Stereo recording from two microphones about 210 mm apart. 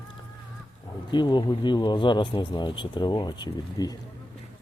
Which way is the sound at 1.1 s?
20° left (ahead or behind).